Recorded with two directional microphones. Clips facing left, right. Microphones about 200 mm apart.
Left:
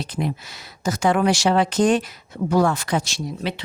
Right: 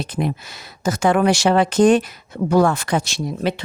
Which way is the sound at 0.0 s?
55° right (ahead or behind).